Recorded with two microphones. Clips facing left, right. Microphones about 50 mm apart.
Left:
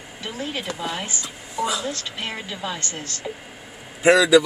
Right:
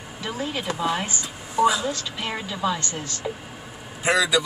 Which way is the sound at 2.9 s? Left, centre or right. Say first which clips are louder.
Right 1 dB; left.